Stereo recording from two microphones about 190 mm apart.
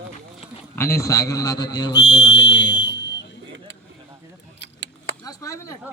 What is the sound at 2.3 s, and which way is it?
Speech, 65° left (ahead or behind).